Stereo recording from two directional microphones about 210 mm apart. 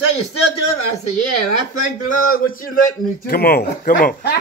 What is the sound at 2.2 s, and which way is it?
A man's voice, 45° left (ahead or behind).